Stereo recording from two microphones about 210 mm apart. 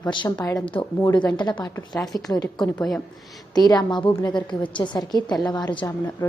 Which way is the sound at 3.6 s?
20° left (ahead or behind).